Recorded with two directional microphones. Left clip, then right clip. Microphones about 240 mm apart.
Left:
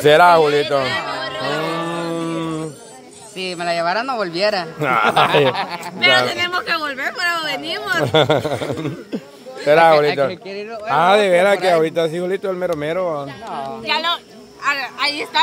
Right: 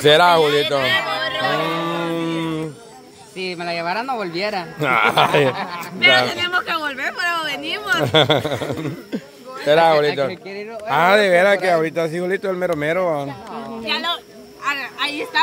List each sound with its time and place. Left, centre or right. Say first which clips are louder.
0.0 s speech: left 2 dB; centre
0.8 s a sound: right 3 dB; right
1.6 s a sound: right 1 dB; centre
3.3 s speech: left 4 dB; centre
4.8 s speech: even; centre
5.5 s speech: left 3 dB; left
5.9 s a woman's voice: even; centre
8.0 s speech: left 1 dB; centre
10.9 s speech: left 1 dB; centre
13.8 s a woman's voice: left 3 dB; centre